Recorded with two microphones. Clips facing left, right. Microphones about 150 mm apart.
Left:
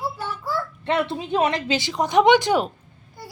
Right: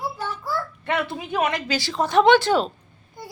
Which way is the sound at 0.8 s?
25° left (ahead or behind).